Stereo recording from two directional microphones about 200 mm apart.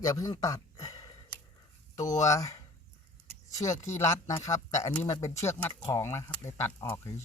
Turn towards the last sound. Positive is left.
turn(degrees=15)  # may be behind; listen again after turning